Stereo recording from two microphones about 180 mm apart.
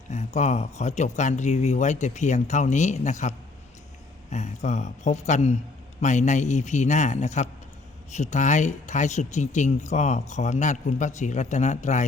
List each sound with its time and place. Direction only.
0.1 s speech: 40° left (ahead or behind)